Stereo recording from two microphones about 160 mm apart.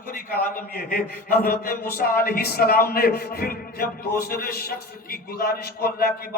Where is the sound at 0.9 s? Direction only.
75° left (ahead or behind).